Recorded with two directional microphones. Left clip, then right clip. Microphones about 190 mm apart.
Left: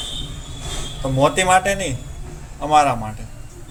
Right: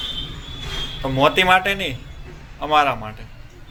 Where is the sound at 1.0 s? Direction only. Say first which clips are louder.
Right 1 dB; 5° left (ahead or behind).